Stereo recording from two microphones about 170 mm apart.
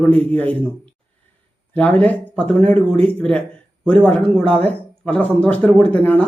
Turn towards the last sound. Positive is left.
turn(degrees=10)  # may be behind; listen again after turning